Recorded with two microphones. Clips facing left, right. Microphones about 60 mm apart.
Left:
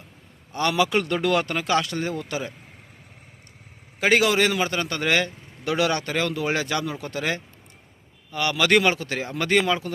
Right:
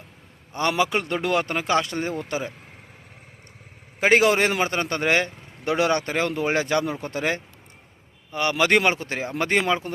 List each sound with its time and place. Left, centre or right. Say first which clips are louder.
0.5 s a man's voice: left 1 dB; right
4.0 s a man's voice: right 1 dB; right